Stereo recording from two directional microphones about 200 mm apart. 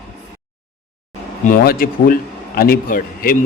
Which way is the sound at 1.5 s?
45° left (ahead or behind).